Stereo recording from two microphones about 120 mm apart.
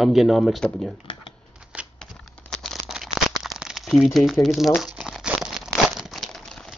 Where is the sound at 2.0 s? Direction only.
5° left (ahead or behind).